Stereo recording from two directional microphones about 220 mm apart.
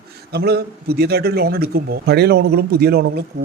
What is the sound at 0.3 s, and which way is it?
Speech, 45° right (ahead or behind).